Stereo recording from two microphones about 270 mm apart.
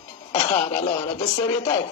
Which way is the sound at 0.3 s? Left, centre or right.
Centre.